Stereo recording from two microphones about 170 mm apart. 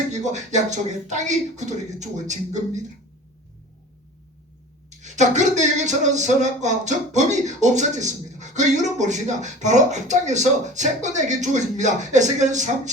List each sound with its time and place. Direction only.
0.1 s speech: 45° right (ahead or behind)
4.9 s speech: 45° right (ahead or behind)